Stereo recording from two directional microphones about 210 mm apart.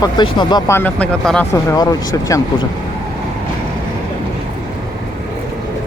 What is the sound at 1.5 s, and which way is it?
Speech, 15° left (ahead or behind).